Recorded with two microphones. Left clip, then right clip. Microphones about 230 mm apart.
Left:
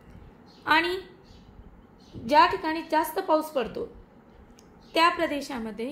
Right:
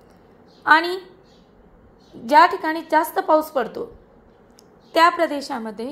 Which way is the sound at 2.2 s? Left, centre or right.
Right.